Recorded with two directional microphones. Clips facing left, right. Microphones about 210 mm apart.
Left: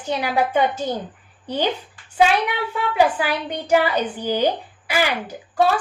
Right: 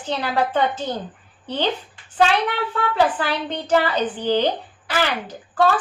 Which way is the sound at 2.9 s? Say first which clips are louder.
Left 2 dB; 10° left (ahead or behind).